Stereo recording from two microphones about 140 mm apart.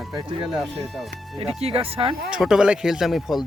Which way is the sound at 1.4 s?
45° right (ahead or behind).